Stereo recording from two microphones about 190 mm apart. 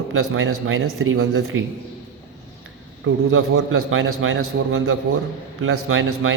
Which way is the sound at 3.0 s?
90° right.